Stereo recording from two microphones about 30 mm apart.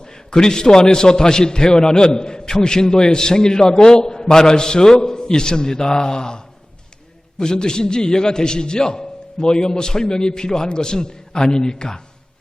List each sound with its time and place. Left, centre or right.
0.3 s a man's voice: left